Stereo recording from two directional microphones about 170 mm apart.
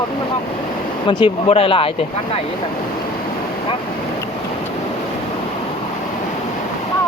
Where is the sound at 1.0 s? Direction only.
30° left (ahead or behind).